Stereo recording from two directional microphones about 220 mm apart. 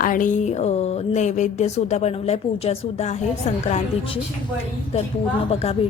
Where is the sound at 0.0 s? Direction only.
35° left (ahead or behind).